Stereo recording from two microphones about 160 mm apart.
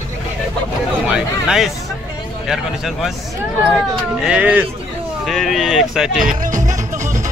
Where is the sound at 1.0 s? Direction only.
5° right (ahead or behind).